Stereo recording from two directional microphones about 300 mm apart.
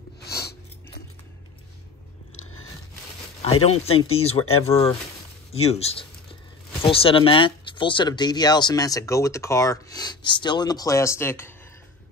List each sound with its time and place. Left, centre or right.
3.6 s speech: centre